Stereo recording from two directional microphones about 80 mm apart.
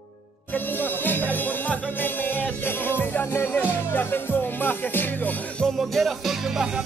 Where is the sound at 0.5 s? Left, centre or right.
Left.